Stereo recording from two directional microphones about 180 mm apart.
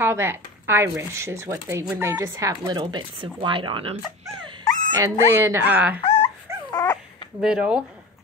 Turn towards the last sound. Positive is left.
turn(degrees=-5)  # may be behind; listen again after turning